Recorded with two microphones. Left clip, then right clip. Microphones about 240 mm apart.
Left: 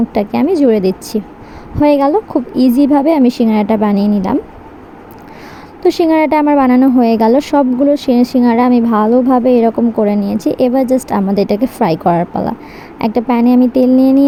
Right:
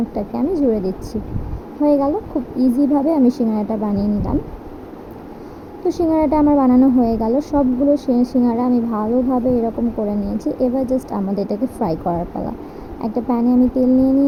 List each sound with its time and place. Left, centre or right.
0.5 s speech: left
5.8 s speech: left
13.6 s a sound: left